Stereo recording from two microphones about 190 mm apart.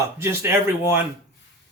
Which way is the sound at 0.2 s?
15° right (ahead or behind).